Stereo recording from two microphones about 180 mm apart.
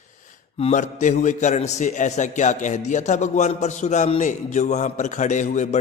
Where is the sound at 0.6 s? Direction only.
40° left (ahead or behind).